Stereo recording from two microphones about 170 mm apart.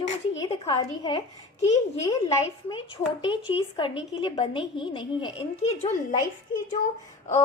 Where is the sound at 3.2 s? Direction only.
30° left (ahead or behind).